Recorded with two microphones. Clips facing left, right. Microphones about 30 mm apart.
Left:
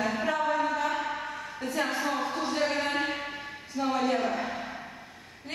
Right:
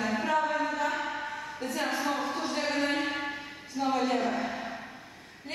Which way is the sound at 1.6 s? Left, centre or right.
Centre.